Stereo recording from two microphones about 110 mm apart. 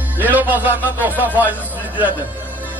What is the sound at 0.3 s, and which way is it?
Speech, 15° right (ahead or behind).